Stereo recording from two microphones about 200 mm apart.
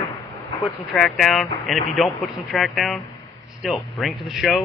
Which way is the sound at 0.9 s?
Centre (ahead or behind).